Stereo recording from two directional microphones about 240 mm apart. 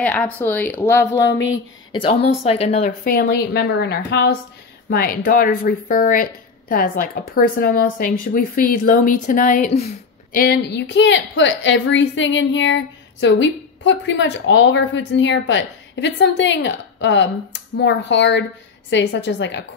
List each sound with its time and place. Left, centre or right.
0.0 s speech: centre
2.0 s speech: left
10.4 s a woman's voice: left